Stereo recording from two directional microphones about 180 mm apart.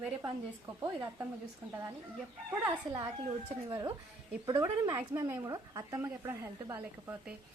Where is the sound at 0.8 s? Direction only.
15° right (ahead or behind).